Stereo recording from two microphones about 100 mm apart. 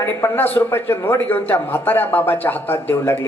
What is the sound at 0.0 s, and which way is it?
A man's voice, 25° left (ahead or behind).